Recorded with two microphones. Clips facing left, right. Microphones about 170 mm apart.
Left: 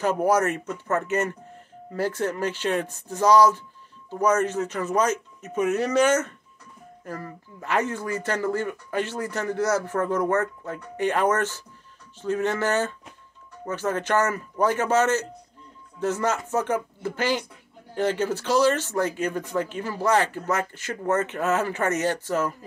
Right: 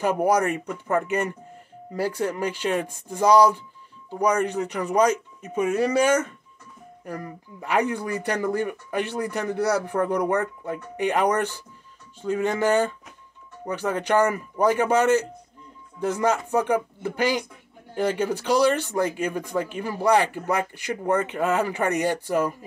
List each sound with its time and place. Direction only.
0.0 s speech: 15° right (ahead or behind)